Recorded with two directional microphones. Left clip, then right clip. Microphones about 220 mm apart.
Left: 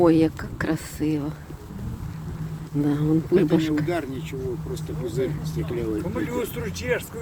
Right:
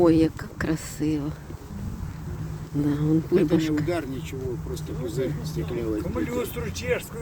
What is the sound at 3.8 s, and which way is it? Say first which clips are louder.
Speech: left 1 dB; 10° right (ahead or behind).